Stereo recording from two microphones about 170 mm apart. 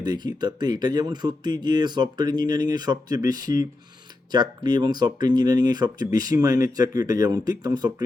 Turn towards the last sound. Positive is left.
turn(degrees=-25)  # may be behind; listen again after turning